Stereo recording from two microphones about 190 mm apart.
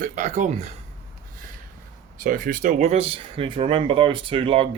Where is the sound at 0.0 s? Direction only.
40° right (ahead or behind).